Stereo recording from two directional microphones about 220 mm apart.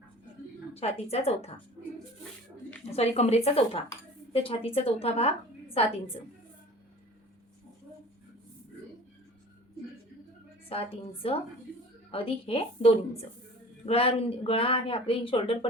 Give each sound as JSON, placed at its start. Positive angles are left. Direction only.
{"t": 0.7, "sound": "speech", "side_deg": 30}
{"t": 2.9, "sound": "a woman's voice", "side_deg": 30}
{"t": 10.7, "sound": "speech", "side_deg": 25}